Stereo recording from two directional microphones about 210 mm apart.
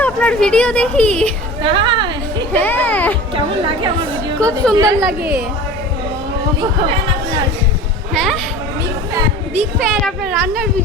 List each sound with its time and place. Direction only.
0.0 s speech: 5° left (ahead or behind)
1.6 s a woman's voice: 25° right (ahead or behind)
2.5 s a child's voice: 10° left (ahead or behind)
4.1 s chatter: 5° left (ahead or behind)
4.7 s a woman's voice: 15° right (ahead or behind)
4.9 s speech: centre (ahead or behind)
8.1 s speech: centre (ahead or behind)
9.7 s speech: centre (ahead or behind)